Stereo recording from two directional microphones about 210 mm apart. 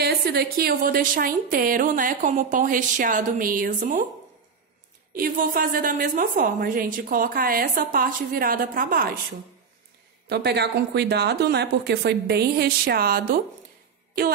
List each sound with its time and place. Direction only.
0.0 s speech: 50° right (ahead or behind)
5.1 s speech: 45° right (ahead or behind)
10.2 s speech: 50° right (ahead or behind)